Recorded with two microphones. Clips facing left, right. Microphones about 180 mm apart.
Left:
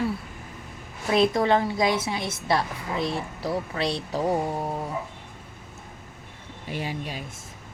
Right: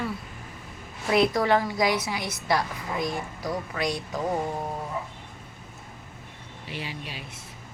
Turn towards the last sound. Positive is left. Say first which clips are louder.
# left 5 dB
turn(degrees=45)  # may be behind; listen again after turning